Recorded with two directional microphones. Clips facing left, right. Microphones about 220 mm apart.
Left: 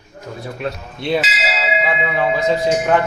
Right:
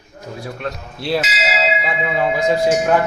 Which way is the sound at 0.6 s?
Centre (ahead or behind).